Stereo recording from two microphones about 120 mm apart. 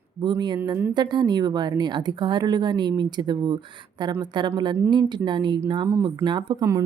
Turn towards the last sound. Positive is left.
turn(degrees=-30)  # may be behind; listen again after turning